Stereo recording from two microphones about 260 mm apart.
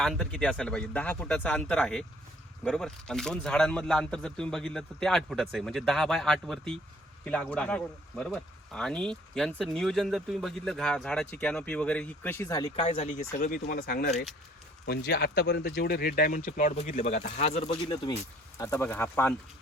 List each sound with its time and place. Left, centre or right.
0.0 s speech: centre